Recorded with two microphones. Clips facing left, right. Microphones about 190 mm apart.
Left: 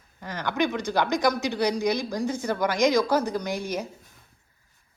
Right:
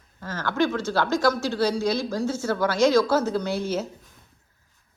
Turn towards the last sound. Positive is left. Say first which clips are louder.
# right 3 dB
turn(degrees=15)  # may be behind; listen again after turning